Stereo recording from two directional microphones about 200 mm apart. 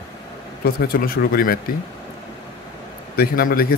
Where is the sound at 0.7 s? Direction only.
50° left (ahead or behind).